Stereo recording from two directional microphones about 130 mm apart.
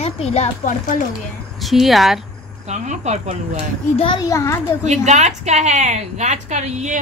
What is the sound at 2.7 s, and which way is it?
Speech, 65° right (ahead or behind).